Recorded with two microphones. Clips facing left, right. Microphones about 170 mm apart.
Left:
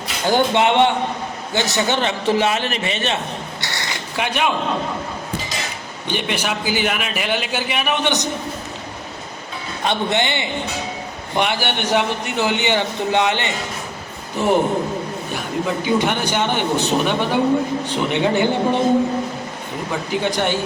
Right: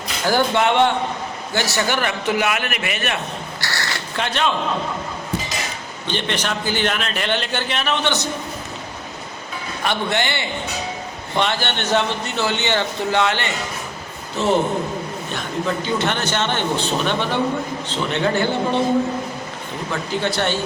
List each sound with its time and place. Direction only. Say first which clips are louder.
0.3 s a man's voice: left 1 dB; 20° left (ahead or behind)
3.6 s crow: right 1 dB; 20° left (ahead or behind)
6.1 s a man's voice: left 1 dB; 10° left (ahead or behind)
9.8 s a man's voice: left 2 dB; 20° left (ahead or behind)
19.9 s a man's voice: left 1 dB; 15° left (ahead or behind)